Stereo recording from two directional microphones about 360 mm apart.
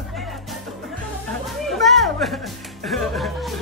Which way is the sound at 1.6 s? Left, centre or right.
Centre.